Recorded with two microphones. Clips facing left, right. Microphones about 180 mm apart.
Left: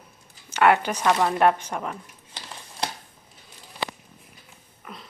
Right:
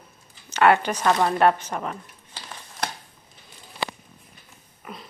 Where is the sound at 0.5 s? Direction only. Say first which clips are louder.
Right 1 dB; 10° left (ahead or behind).